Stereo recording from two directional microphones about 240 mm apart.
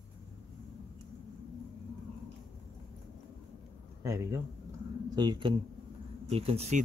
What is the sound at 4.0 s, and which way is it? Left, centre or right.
A man's voice, centre.